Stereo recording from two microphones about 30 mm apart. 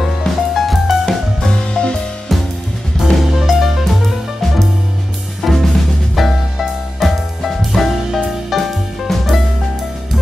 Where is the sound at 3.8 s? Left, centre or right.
Centre.